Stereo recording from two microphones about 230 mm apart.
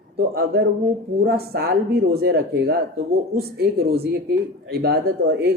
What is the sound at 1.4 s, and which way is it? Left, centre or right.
Speech, right.